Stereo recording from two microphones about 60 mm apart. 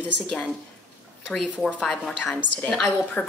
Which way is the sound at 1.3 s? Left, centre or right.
Centre.